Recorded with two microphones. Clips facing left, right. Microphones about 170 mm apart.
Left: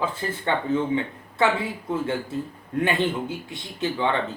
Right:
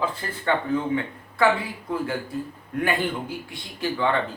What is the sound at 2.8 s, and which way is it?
Speech, 25° left (ahead or behind).